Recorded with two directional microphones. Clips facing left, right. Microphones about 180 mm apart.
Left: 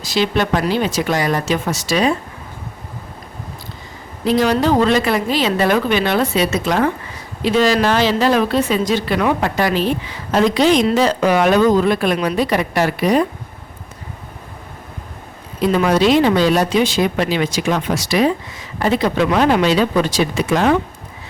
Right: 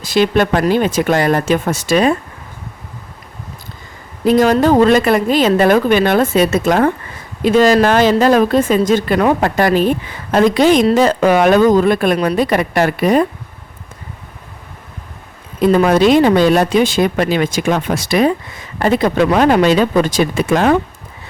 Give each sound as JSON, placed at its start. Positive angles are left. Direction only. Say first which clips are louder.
{"t": 0.0, "sound": "speech", "louder": "right 5 dB", "side_deg": -50}
{"t": 4.2, "sound": "speech", "louder": "right 4 dB", "side_deg": -50}
{"t": 15.6, "sound": "speech", "louder": "right 4 dB", "side_deg": -50}